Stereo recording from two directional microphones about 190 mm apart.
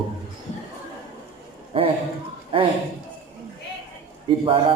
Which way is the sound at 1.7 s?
30° right (ahead or behind).